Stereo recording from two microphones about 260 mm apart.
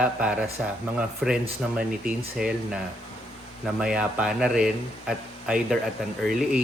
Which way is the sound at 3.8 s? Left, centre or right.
Centre.